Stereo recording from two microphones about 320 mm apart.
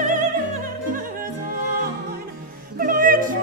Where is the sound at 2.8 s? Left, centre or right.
Right.